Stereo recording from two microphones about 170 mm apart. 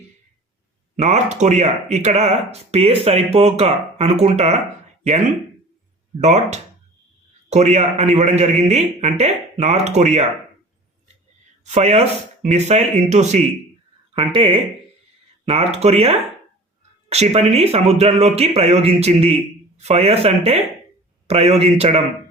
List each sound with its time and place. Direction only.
0.9 s speech: 40° right (ahead or behind)
6.1 s speech: 40° right (ahead or behind)
11.6 s speech: 40° right (ahead or behind)
15.8 s speech: 35° right (ahead or behind)